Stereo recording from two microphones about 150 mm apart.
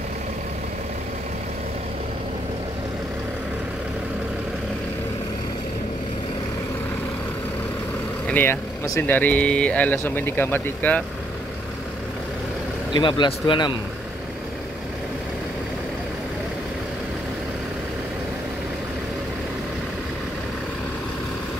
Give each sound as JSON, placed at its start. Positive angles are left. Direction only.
{"t": 8.3, "sound": "speech", "side_deg": 15}
{"t": 12.9, "sound": "speech", "side_deg": 30}